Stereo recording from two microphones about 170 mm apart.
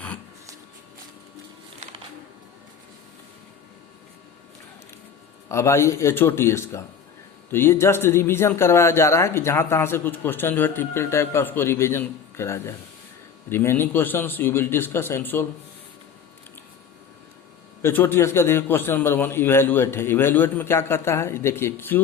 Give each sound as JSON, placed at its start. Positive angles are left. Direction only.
{"t": 5.5, "sound": "a man's voice", "side_deg": 15}
{"t": 17.8, "sound": "a man's voice", "side_deg": 10}